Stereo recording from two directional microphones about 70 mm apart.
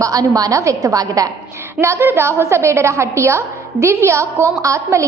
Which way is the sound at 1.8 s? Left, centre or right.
Right.